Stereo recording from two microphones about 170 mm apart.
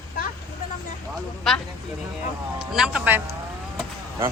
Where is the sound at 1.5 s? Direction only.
Centre (ahead or behind).